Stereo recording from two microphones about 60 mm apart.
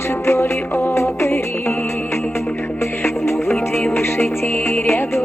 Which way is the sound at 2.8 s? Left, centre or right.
Left.